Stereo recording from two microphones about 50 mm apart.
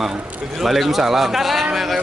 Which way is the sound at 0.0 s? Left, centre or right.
Centre.